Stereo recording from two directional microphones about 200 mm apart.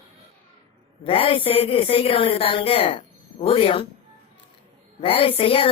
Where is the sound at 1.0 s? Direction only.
25° left (ahead or behind).